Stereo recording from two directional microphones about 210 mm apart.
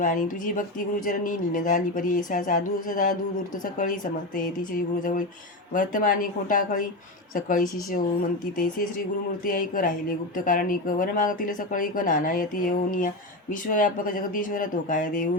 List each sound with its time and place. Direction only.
0.0 s speech: 40° left (ahead or behind)
5.7 s speech: 40° left (ahead or behind)